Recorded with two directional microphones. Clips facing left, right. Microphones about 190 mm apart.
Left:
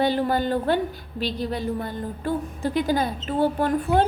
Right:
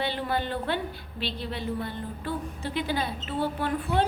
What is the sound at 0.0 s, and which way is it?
A woman's voice, 40° left (ahead or behind).